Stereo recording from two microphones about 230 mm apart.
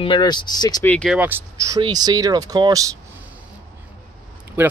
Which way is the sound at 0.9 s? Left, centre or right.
Centre.